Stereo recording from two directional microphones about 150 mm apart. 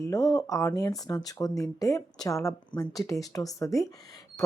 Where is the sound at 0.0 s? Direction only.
25° left (ahead or behind).